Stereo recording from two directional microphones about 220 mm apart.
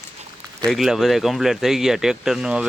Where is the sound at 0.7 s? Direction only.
Centre (ahead or behind).